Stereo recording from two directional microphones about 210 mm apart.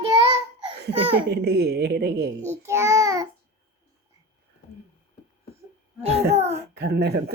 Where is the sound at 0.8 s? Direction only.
55° right (ahead or behind).